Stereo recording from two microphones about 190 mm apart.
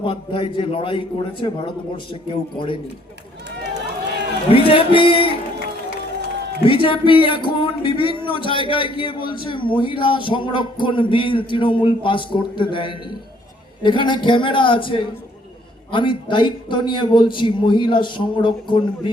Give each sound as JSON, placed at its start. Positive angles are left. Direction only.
{"t": 0.0, "sound": "speech", "side_deg": 25}
{"t": 4.4, "sound": "speech", "side_deg": 30}
{"t": 6.7, "sound": "speech", "side_deg": 25}